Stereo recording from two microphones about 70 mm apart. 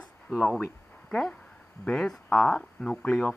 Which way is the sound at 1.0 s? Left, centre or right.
Centre.